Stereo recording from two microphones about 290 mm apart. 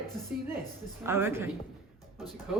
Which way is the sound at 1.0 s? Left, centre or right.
Centre.